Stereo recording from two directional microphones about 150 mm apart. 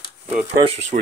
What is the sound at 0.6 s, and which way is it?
Speech, 50° right (ahead or behind).